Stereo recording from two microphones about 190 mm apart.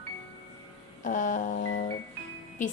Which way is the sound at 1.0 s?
40° left (ahead or behind).